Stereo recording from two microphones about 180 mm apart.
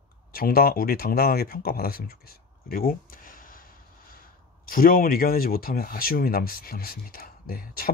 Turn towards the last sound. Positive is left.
turn(degrees=55)  # may be behind; listen again after turning